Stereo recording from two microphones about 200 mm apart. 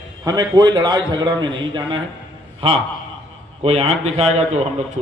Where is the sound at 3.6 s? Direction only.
30° right (ahead or behind).